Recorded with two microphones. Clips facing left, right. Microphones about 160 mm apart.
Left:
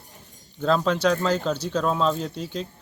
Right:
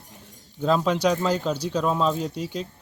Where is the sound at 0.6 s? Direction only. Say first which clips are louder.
Even; 10° right (ahead or behind).